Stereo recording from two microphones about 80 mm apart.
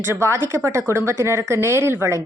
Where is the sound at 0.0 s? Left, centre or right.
Right.